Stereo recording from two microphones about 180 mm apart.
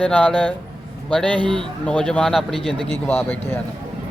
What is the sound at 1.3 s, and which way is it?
Speech, 25° right (ahead or behind).